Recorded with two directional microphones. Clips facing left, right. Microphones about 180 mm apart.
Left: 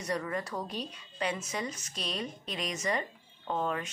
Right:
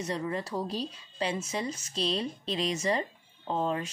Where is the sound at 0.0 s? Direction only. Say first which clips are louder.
Right 1 dB; 25° right (ahead or behind).